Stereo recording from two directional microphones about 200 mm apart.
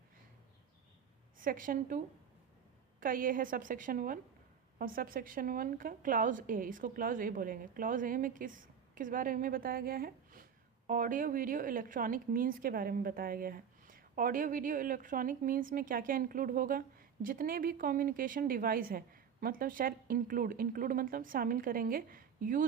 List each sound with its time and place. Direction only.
1.4 s a woman's voice: 45° right (ahead or behind)
3.0 s a woman's voice: 45° right (ahead or behind)